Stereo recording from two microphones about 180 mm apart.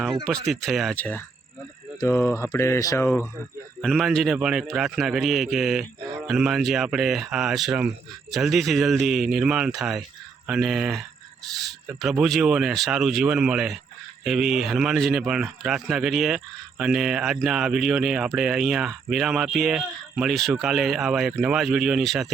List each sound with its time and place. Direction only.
0.3 s speech: centre (ahead or behind); by 3.1 s 15° left (ahead or behind)
3.8 s speech: centre (ahead or behind)